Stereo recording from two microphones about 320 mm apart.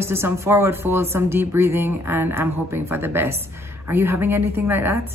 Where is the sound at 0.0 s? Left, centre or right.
Centre.